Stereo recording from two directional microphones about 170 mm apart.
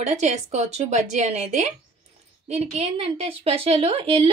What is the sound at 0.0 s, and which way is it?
A woman's voice, 45° right (ahead or behind).